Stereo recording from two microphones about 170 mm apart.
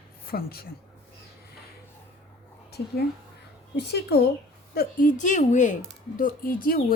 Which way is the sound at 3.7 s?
75° left (ahead or behind).